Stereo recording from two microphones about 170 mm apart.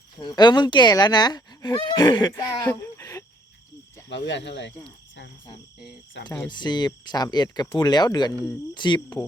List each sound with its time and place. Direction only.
0.2 s speech: 25° left (ahead or behind)
4.1 s speech: 90° left
6.2 s speech: 90° left
6.5 s speech: 25° left (ahead or behind)